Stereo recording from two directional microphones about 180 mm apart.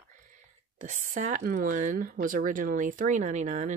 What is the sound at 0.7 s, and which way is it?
Speech, 45° right (ahead or behind).